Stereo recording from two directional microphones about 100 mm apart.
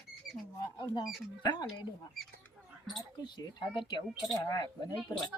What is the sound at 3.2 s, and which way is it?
Speech, 50° left (ahead or behind).